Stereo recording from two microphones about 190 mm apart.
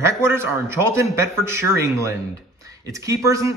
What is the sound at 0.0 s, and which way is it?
A man's voice, 15° right (ahead or behind).